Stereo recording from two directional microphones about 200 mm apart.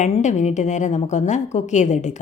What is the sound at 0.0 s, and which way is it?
Speech, 35° left (ahead or behind).